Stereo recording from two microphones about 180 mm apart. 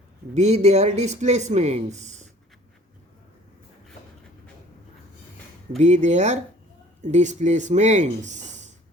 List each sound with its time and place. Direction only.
0.3 s speech: 40° right (ahead or behind)
5.7 s speech: 40° right (ahead or behind)